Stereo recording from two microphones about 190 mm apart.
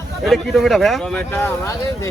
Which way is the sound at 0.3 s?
Centre (ahead or behind).